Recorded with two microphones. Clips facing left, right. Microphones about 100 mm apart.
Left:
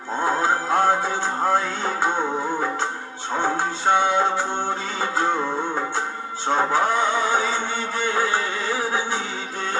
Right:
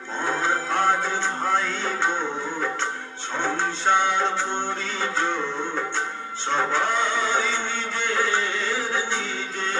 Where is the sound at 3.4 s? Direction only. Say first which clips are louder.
Left 2 dB; 10° left (ahead or behind).